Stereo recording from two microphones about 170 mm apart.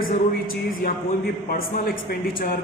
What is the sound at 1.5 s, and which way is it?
A man's voice, 60° left (ahead or behind).